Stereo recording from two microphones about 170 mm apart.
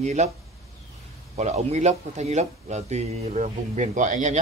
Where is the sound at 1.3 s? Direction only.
40° right (ahead or behind).